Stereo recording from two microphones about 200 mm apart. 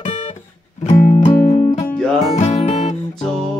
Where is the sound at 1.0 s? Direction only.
35° left (ahead or behind).